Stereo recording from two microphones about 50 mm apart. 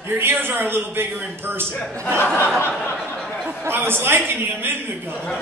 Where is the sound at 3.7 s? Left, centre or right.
Right.